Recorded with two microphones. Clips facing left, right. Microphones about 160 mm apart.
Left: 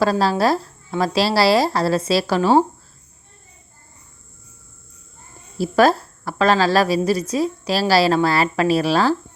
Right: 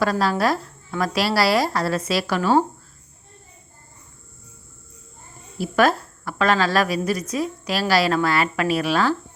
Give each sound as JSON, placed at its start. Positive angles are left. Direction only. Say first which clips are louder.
{"t": 0.0, "sound": "speech", "louder": "left 3 dB", "side_deg": 30}
{"t": 5.5, "sound": "a woman's voice", "louder": "left 3 dB", "side_deg": 35}